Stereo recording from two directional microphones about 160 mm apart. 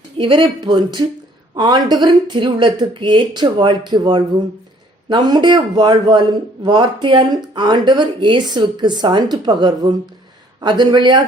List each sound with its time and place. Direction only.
0.2 s a man's voice: 30° right (ahead or behind)